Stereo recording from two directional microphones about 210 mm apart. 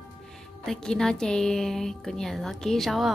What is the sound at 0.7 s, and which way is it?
Speech, 5° left (ahead or behind).